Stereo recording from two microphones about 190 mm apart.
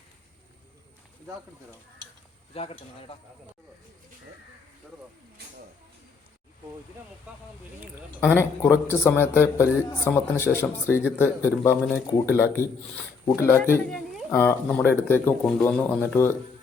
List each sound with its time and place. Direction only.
2.5 s speech: 30° left (ahead or behind)
8.2 s speech: 10° left (ahead or behind)